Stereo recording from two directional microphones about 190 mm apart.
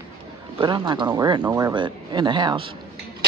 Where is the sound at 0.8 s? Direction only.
25° right (ahead or behind).